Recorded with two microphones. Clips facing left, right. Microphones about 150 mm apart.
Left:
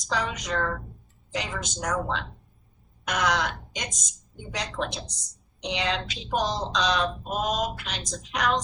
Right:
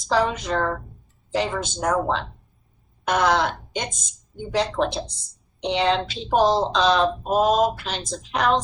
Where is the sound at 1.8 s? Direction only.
50° right (ahead or behind).